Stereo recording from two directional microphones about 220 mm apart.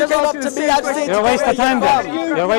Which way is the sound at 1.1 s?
20° left (ahead or behind).